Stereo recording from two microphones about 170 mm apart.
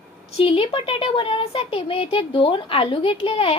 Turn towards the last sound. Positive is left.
turn(degrees=35)  # may be behind; listen again after turning